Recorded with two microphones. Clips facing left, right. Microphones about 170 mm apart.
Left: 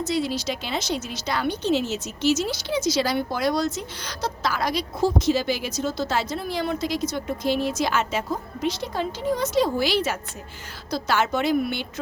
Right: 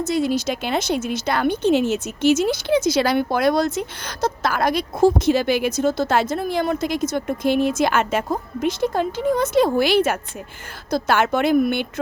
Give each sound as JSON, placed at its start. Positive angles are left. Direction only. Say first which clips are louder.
{"t": 0.0, "sound": "a woman's voice", "louder": "right 5 dB", "side_deg": -50}